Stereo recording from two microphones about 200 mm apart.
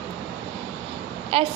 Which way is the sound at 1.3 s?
30° right (ahead or behind).